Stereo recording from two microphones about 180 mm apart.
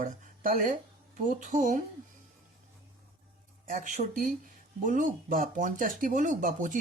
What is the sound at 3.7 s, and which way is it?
Speech, 45° right (ahead or behind).